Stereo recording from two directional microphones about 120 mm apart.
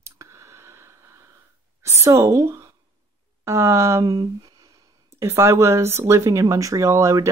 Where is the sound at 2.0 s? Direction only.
25° right (ahead or behind).